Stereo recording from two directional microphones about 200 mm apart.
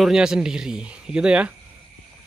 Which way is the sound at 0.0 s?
5° right (ahead or behind).